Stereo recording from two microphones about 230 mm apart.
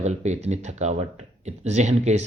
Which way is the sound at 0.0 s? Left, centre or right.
Right.